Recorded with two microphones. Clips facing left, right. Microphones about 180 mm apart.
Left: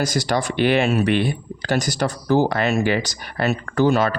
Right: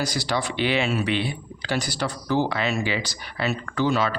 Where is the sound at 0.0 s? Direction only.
45° left (ahead or behind).